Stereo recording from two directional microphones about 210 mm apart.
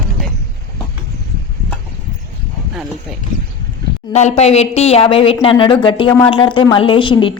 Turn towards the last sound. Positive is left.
turn(degrees=25)  # may be behind; listen again after turning